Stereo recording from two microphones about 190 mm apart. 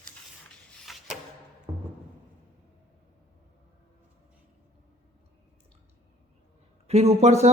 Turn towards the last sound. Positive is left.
turn(degrees=-35)  # may be behind; listen again after turning